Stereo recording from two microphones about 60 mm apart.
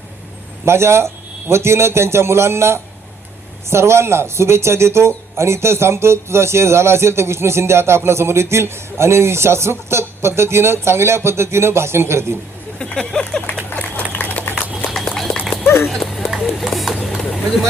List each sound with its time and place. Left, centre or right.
0.6 s speech: right
12.8 s speech: centre
14.2 s a sound: left
14.9 s run: centre
15.6 s horse: left
16.0 s run: centre
16.2 s a sound: centre